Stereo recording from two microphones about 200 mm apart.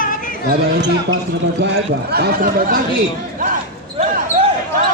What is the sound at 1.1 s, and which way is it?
A man's voice, 60° right (ahead or behind).